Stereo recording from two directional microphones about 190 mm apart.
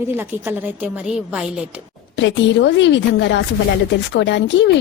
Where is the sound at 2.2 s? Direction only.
70° left (ahead or behind).